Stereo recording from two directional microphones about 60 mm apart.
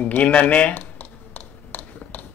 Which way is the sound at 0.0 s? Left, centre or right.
Left.